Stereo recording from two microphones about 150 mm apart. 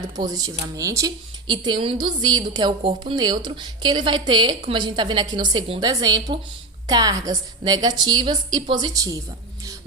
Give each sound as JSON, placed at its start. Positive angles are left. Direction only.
{"t": 0.2, "sound": "speech", "side_deg": -25}